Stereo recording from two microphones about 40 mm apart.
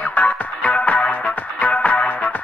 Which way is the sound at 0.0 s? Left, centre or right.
Left.